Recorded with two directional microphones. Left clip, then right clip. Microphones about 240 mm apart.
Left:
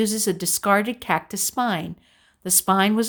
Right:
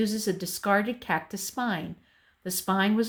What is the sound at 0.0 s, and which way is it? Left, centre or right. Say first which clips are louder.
Speech: left 6 dB; left.